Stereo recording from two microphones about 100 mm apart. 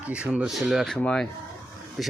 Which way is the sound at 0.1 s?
10° right (ahead or behind).